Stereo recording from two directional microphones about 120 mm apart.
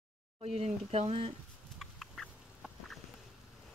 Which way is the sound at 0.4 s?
60° right (ahead or behind).